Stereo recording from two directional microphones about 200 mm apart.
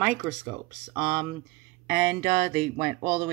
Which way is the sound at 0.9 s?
20° right (ahead or behind).